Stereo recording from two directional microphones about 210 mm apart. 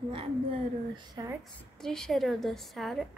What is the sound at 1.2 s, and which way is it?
Speech, 20° right (ahead or behind).